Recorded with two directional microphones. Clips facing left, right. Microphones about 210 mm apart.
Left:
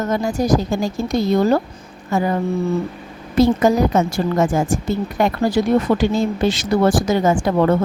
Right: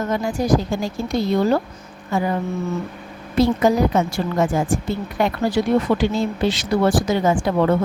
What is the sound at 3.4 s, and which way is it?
A woman's voice, 45° left (ahead or behind).